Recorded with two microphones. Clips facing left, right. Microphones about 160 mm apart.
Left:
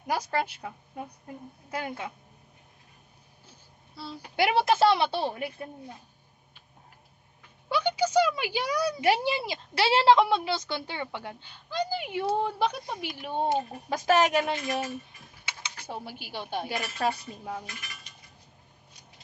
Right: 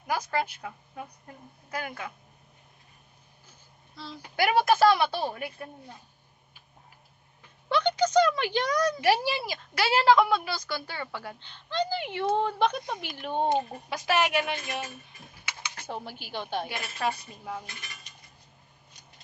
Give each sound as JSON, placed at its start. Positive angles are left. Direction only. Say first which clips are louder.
{"t": 0.1, "sound": "a woman's voice", "louder": "even", "side_deg": 30}
{"t": 3.9, "sound": "a child's voice", "louder": "left 2 dB", "side_deg": 10}
{"t": 4.4, "sound": "speech", "louder": "right 1 dB", "side_deg": 30}
{"t": 7.7, "sound": "speech", "louder": "right 2 dB", "side_deg": 10}
{"t": 11.3, "sound": "speech", "louder": "right 2 dB", "side_deg": 10}
{"t": 13.9, "sound": "a woman's voice", "louder": "left 3 dB", "side_deg": 45}
{"t": 16.2, "sound": "speech", "louder": "right 2 dB", "side_deg": 5}
{"t": 16.6, "sound": "a woman's voice", "louder": "left 2 dB", "side_deg": 40}